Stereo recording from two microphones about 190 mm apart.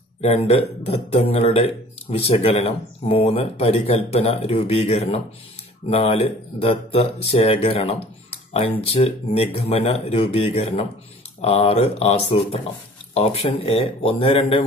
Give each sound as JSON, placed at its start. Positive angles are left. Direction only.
{"t": 0.2, "sound": "speech", "side_deg": 30}